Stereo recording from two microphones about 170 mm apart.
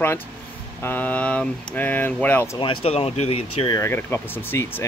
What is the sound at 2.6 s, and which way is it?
Speech, 35° left (ahead or behind).